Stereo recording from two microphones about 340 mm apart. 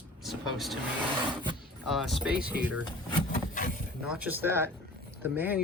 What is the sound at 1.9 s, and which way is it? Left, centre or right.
Speech, centre.